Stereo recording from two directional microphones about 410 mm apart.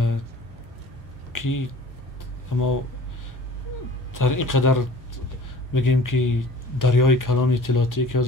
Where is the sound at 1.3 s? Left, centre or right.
Left.